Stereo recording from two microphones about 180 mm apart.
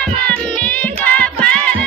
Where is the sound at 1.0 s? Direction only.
10° left (ahead or behind).